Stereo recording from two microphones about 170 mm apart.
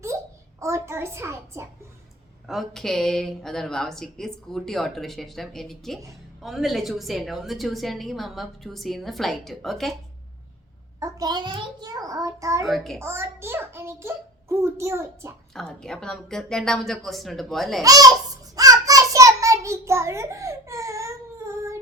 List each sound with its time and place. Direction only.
0.1 s a sound: 15° right (ahead or behind)
0.6 s a child's voice: 15° right (ahead or behind)
2.5 s a woman's voice: centre (ahead or behind)
11.0 s a child's voice: 20° right (ahead or behind)
12.6 s a woman's voice: centre (ahead or behind)
13.0 s a child's voice: 15° right (ahead or behind)
15.5 s a woman's voice: 5° left (ahead or behind)
17.8 s child singing: 20° right (ahead or behind)